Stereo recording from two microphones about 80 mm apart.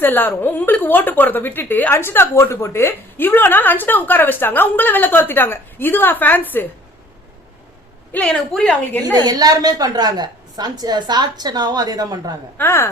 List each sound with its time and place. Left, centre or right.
0.0 s a woman's voice: left
8.1 s a woman's voice: centre
9.1 s a woman's voice: right
12.5 s a woman's voice: left